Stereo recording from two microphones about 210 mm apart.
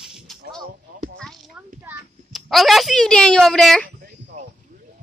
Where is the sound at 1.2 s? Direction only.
Centre (ahead or behind).